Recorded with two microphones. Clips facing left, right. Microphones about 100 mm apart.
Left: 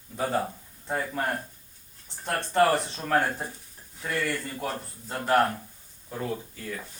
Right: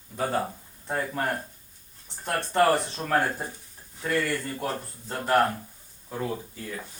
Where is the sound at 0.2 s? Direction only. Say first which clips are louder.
Even; 5° right (ahead or behind).